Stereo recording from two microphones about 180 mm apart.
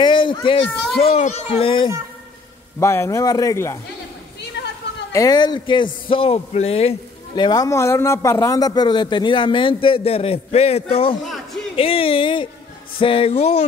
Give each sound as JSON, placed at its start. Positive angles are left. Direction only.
{"t": 0.0, "sound": "speech", "side_deg": 25}
{"t": 2.8, "sound": "speech", "side_deg": 15}
{"t": 4.6, "sound": "a sound", "side_deg": 70}
{"t": 5.1, "sound": "a man's voice", "side_deg": 20}
{"t": 11.2, "sound": "a sound", "side_deg": 0}
{"t": 11.7, "sound": "speech", "side_deg": 30}